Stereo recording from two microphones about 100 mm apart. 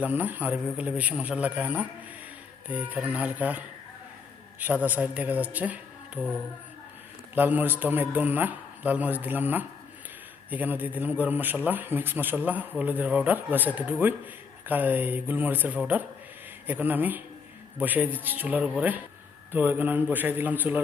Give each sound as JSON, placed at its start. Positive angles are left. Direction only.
{"t": 0.0, "sound": "a man's voice", "side_deg": -15}
{"t": 4.6, "sound": "a man's voice", "side_deg": -15}